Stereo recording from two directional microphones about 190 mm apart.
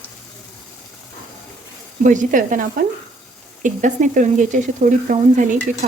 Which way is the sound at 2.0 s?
45° right (ahead or behind).